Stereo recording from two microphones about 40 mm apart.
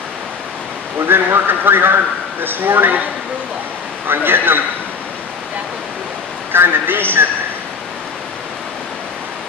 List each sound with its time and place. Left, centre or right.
1.0 s speech: right
4.1 s speech: right
6.5 s speech: right